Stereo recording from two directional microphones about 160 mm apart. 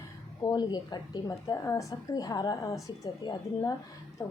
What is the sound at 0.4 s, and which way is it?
A woman's voice, 25° left (ahead or behind).